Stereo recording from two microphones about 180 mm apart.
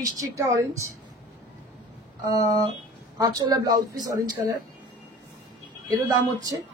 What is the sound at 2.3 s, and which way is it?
Speech, 20° right (ahead or behind).